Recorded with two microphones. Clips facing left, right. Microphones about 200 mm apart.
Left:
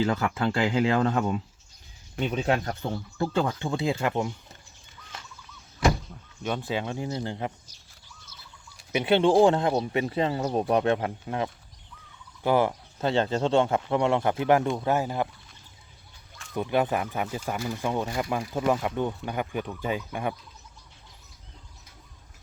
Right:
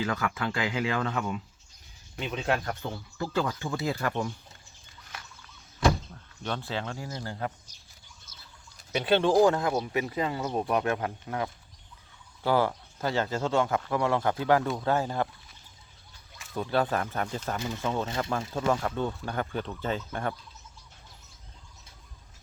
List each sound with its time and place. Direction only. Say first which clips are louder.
0.0 s speech: left 5 dB; 30° left (ahead or behind)
6.4 s speech: left 4 dB; 15° left (ahead or behind)
8.9 s speech: left 3 dB; 20° left (ahead or behind)
16.6 s speech: left 2 dB; 15° left (ahead or behind)